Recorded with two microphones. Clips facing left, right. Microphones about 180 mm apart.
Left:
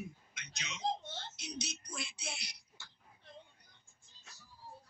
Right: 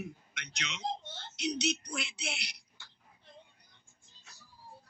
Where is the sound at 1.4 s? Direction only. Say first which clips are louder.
Right 16 dB; 75° right (ahead or behind).